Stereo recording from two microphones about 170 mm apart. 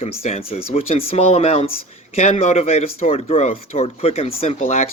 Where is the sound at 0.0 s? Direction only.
40° left (ahead or behind).